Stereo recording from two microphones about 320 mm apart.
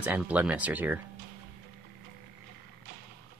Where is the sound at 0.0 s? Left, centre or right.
Centre.